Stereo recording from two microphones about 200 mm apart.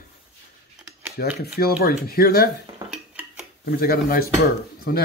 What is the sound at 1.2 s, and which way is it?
Speech, 50° left (ahead or behind).